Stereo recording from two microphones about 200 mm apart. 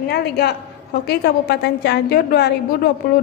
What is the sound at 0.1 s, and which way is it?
A woman's voice, 55° left (ahead or behind).